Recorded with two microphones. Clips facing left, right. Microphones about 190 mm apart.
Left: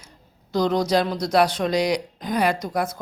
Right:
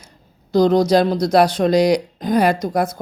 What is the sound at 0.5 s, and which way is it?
Speech, 35° right (ahead or behind).